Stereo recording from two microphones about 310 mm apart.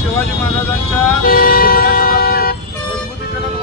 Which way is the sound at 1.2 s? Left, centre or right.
Left.